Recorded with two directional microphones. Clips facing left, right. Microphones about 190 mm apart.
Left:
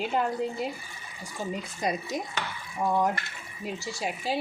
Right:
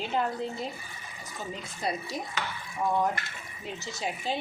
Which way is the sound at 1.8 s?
20° left (ahead or behind).